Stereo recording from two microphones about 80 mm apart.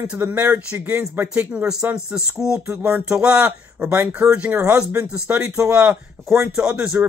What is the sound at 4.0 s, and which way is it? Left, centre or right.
Speech, right.